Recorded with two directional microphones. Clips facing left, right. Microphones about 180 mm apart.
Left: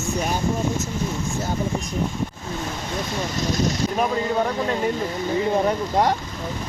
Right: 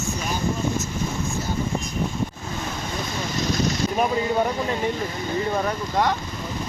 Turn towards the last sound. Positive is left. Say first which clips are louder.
# left 3 dB
turn(degrees=30)  # may be behind; listen again after turning